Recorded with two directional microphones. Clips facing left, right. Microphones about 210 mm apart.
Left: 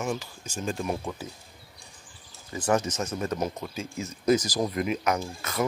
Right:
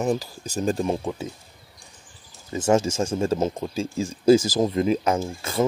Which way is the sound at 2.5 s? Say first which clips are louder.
Right 5 dB; 25° right (ahead or behind).